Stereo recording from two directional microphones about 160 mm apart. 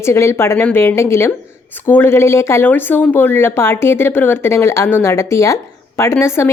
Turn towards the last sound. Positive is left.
turn(degrees=15)  # may be behind; listen again after turning